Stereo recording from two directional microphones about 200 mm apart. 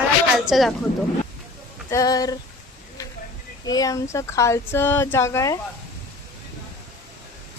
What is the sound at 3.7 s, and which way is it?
Speech, 20° left (ahead or behind).